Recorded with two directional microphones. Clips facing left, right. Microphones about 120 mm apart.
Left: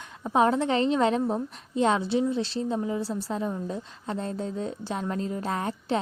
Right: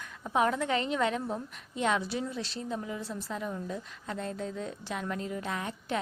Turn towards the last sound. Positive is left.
turn(degrees=35)  # may be behind; listen again after turning